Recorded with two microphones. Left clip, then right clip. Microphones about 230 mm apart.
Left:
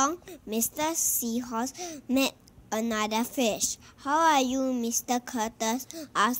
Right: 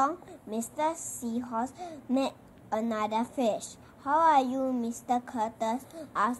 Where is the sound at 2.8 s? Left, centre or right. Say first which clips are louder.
Left 2 dB; left.